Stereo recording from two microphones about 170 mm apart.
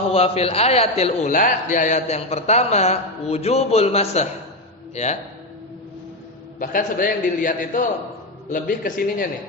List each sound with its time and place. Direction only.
0.1 s speech: 35° left (ahead or behind)
1.3 s speech: 55° left (ahead or behind)
6.6 s a man's voice: 55° left (ahead or behind)